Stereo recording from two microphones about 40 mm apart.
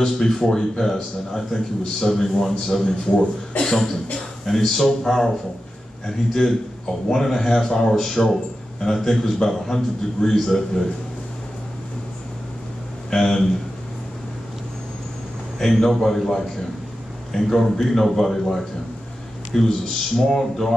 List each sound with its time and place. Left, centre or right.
0.0 s a man's voice: centre
2.8 s a man's voice: left
3.6 s a man's voice: centre
13.1 s a man's voice: centre
15.6 s a man's voice: centre